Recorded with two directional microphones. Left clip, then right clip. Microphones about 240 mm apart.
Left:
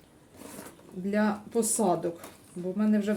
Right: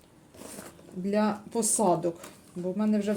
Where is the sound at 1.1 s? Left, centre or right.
Centre.